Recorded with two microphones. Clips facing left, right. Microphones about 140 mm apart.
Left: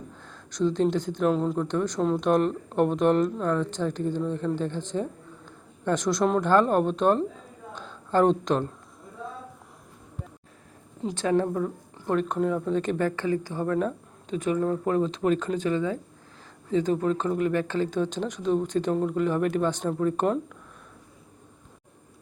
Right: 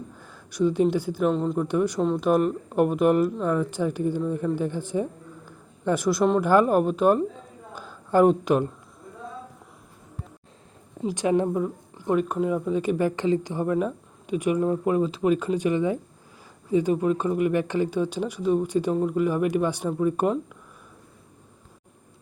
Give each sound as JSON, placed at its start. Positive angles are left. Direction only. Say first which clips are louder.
{"t": 0.2, "sound": "speech", "louder": "right 2 dB", "side_deg": -10}
{"t": 1.5, "sound": "a man's voice", "louder": "right 3 dB", "side_deg": -10}
{"t": 7.7, "sound": "a sound", "louder": "right 3 dB", "side_deg": -5}
{"t": 11.0, "sound": "speech", "louder": "right 2 dB", "side_deg": -15}